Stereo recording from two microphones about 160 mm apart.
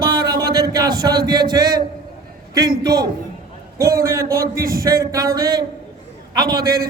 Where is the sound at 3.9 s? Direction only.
65° right (ahead or behind).